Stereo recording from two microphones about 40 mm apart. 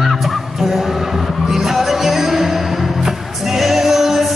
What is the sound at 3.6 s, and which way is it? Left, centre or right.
Music, centre.